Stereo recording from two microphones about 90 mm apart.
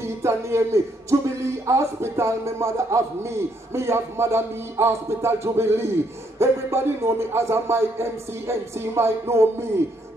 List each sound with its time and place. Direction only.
0.0 s speech: 30° right (ahead or behind)